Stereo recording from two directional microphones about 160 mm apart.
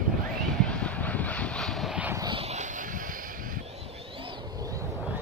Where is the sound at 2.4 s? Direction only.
45° right (ahead or behind).